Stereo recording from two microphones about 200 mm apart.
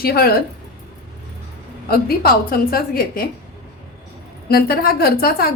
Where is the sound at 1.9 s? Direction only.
50° left (ahead or behind).